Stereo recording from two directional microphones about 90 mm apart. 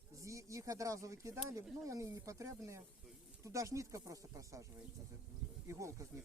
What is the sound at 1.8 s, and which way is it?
Speech, 35° right (ahead or behind).